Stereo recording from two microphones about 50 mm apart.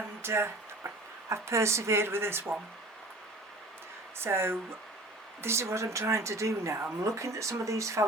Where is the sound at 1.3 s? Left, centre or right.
Right.